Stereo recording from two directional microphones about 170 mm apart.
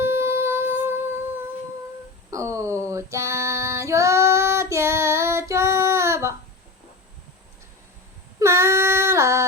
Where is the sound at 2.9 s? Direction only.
15° right (ahead or behind).